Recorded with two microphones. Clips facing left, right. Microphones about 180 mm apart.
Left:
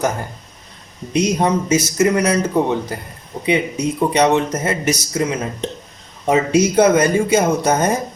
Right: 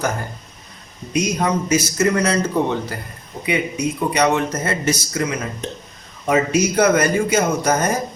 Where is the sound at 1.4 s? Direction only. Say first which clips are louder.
Left 2 dB; 25° left (ahead or behind).